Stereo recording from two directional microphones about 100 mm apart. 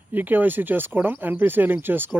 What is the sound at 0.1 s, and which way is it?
Speech, 20° right (ahead or behind).